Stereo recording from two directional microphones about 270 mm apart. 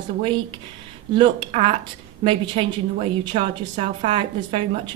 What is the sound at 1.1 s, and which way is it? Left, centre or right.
A woman's voice, centre.